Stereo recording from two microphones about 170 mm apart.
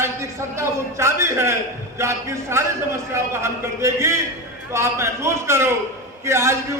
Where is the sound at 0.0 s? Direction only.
15° right (ahead or behind).